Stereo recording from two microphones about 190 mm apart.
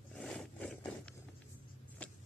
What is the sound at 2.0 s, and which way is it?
Vehicle, 5° left (ahead or behind).